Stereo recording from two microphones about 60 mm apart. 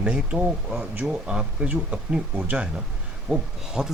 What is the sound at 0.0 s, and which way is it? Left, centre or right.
Speech, centre.